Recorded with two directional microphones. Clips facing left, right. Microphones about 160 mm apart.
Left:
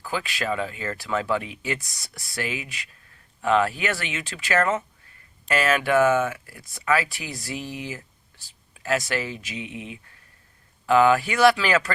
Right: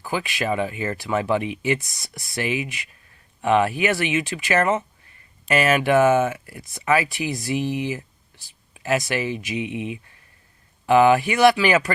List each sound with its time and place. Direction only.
0.0 s speech: 15° right (ahead or behind)